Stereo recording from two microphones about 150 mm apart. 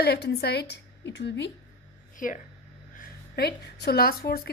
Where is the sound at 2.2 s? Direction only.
65° left (ahead or behind).